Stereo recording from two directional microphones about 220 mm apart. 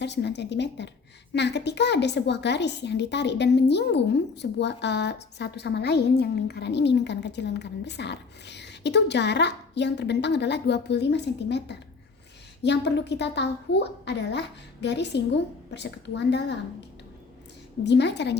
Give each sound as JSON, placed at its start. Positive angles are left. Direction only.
{"t": 0.0, "sound": "a woman's voice", "side_deg": 50}
{"t": 17.8, "sound": "a woman's voice", "side_deg": 50}